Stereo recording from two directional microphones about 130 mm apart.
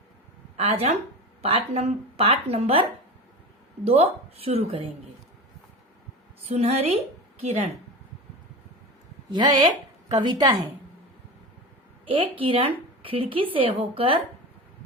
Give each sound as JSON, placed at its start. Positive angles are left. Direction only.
{"t": 0.5, "sound": "a woman's voice", "side_deg": -50}
{"t": 3.8, "sound": "speech", "side_deg": -50}
{"t": 6.5, "sound": "speech", "side_deg": -55}
{"t": 9.3, "sound": "a woman's voice", "side_deg": -35}
{"t": 12.0, "sound": "speech", "side_deg": -45}